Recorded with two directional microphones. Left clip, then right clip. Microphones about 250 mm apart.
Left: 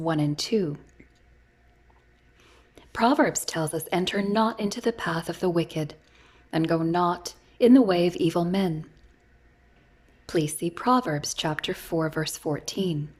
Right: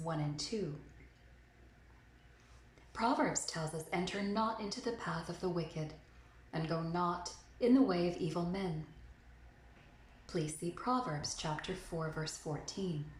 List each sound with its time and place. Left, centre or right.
0.0 s a woman's voice: left
2.9 s a woman's voice: left
10.2 s a woman's voice: left